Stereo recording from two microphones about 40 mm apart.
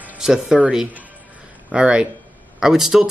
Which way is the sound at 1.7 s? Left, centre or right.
Right.